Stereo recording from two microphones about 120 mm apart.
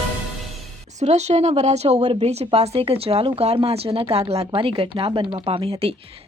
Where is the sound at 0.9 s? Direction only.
70° right (ahead or behind).